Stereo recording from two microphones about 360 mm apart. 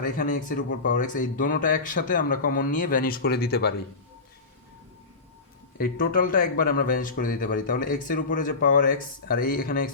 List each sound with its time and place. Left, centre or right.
0.0 s speech: left
5.7 s speech: left